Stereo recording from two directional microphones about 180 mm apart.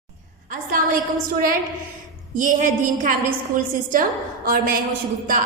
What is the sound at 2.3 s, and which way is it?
A woman's voice, 45° right (ahead or behind).